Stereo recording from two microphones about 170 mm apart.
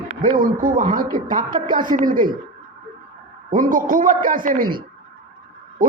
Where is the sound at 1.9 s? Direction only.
55° right (ahead or behind).